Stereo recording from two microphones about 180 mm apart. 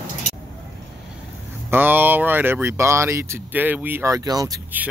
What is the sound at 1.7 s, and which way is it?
Speech, 10° right (ahead or behind).